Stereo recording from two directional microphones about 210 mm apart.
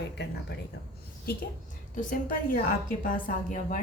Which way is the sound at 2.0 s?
40° left (ahead or behind).